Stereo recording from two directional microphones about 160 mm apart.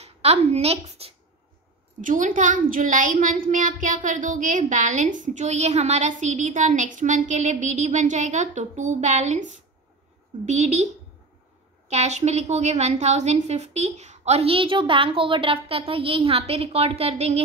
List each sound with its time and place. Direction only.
0.0 s a woman's voice: 40° right (ahead or behind)
2.0 s a woman's voice: 55° right (ahead or behind)
11.9 s a woman's voice: 45° right (ahead or behind)